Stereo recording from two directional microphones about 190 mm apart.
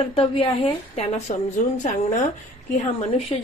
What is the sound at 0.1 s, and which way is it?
A woman's voice, 30° left (ahead or behind).